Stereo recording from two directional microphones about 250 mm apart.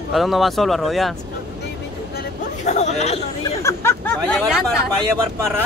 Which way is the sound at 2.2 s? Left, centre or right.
Left.